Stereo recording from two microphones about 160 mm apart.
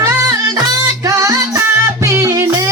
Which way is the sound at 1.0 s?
20° right (ahead or behind).